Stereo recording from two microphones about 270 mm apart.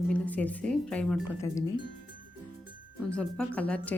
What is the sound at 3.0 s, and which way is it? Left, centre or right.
Speech, centre.